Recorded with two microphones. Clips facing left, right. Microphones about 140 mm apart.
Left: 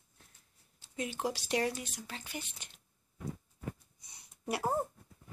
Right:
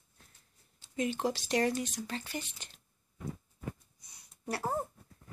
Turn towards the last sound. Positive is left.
turn(degrees=15)  # may be behind; listen again after turning